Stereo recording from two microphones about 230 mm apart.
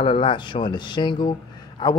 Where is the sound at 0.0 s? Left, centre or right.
Left.